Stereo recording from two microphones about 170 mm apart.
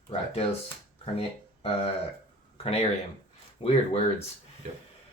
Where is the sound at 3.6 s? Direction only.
40° left (ahead or behind).